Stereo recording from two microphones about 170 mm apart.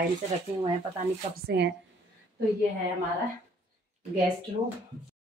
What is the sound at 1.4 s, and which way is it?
Speech, 85° right.